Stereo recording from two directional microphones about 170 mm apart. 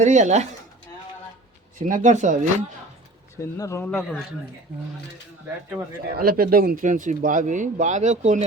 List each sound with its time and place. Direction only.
0.0 s speech: 45° right (ahead or behind)
1.8 s speech: 45° right (ahead or behind)
3.6 s speech: 15° left (ahead or behind)
5.7 s speech: 5° right (ahead or behind)
6.1 s speech: 60° right (ahead or behind); by 8.4 s 40° right (ahead or behind)